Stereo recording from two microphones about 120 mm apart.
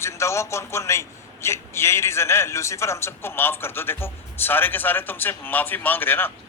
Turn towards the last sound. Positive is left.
turn(degrees=15)  # may be behind; listen again after turning